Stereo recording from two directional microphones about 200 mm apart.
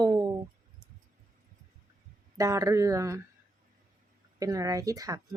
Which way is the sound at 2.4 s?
15° right (ahead or behind).